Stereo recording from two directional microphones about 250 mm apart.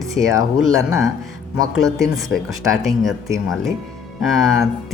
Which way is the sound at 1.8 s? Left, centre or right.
Centre.